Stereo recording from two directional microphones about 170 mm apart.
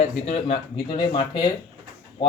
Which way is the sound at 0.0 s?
40° left (ahead or behind).